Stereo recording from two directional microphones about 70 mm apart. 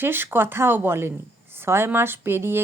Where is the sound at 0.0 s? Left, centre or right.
Right.